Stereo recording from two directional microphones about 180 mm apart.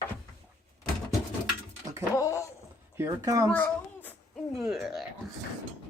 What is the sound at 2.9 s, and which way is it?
Speech, 15° right (ahead or behind).